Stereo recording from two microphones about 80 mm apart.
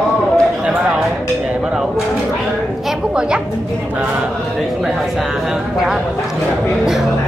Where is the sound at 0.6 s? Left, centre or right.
Centre.